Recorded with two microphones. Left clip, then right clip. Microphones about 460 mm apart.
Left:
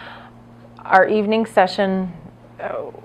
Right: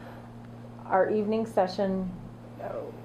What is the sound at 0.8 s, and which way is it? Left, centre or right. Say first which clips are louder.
A woman's voice: left 11 dB; left.